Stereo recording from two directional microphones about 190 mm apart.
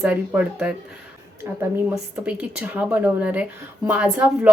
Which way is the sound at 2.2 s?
5° right (ahead or behind).